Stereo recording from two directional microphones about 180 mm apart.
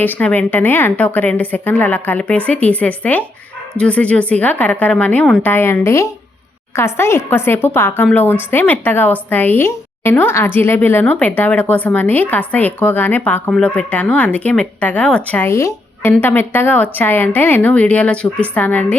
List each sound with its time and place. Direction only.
0.0 s a woman's voice: 10° left (ahead or behind)